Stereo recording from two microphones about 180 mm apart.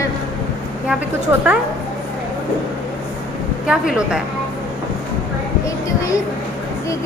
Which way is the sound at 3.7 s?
5° right (ahead or behind).